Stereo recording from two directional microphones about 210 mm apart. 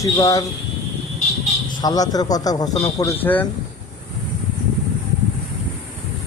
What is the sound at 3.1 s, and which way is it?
Speech, 10° left (ahead or behind).